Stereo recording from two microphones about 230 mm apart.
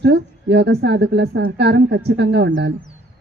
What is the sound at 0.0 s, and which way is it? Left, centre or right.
A woman's voice, right.